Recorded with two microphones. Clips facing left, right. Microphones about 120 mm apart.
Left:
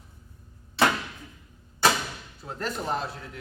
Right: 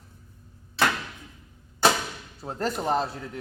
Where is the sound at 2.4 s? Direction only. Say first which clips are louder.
Right 4 dB; 35° right (ahead or behind).